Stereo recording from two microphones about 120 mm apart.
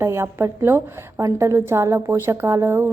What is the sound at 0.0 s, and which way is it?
A woman's voice, 20° right (ahead or behind).